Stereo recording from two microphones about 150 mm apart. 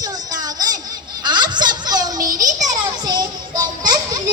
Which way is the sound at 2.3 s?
25° right (ahead or behind).